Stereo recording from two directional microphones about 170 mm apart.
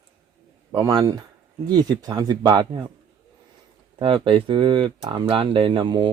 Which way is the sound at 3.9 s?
30° right (ahead or behind).